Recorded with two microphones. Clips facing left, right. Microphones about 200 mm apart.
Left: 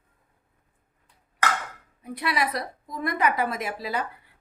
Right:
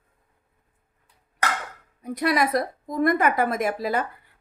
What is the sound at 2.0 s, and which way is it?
A woman's voice, 45° right (ahead or behind).